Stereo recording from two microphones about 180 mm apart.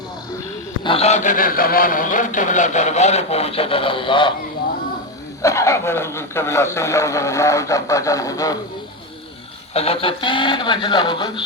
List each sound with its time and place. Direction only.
0.9 s a man's voice: 35° left (ahead or behind)
5.4 s a man's voice: 15° left (ahead or behind)
9.7 s speech: 35° left (ahead or behind)